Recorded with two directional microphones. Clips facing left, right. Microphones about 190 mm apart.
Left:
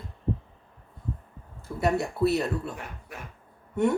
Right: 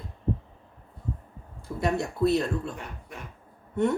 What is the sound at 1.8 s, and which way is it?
Speech, 5° left (ahead or behind).